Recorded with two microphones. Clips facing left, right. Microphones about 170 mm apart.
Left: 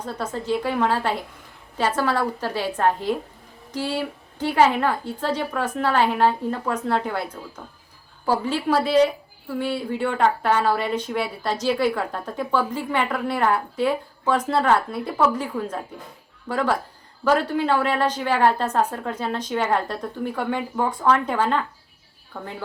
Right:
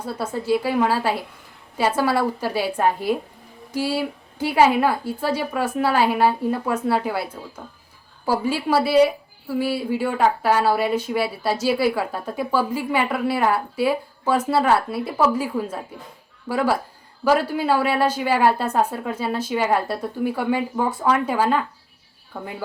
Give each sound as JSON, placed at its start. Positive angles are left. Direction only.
{"t": 0.0, "sound": "a woman's voice", "side_deg": -10}